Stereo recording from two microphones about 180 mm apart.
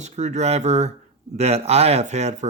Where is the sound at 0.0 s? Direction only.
40° right (ahead or behind).